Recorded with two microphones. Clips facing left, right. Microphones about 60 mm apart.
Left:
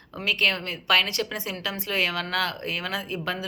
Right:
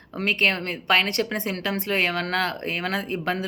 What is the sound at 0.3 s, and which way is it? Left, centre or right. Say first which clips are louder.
A woman's voice: right 2 dB; right.